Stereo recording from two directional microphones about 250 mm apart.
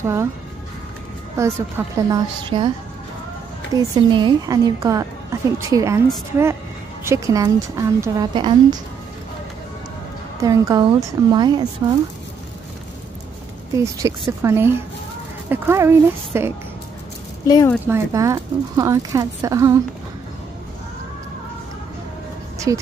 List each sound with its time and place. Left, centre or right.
0.0 s a woman's voice: centre
1.4 s a woman's voice: centre
3.7 s a woman's voice: centre
7.1 s a woman's voice: centre
10.4 s a woman's voice: centre
13.7 s a woman's voice: centre
17.5 s speech: centre
17.8 s a woman's voice: centre
22.7 s a woman's voice: centre